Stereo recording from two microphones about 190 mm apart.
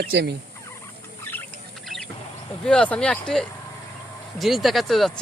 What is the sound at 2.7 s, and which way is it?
Speech, 5° left (ahead or behind).